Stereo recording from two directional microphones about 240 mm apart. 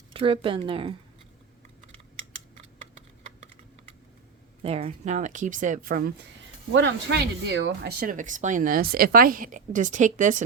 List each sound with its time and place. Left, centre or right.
0.1 s a woman's voice: right
4.6 s speech: right
6.7 s speech: right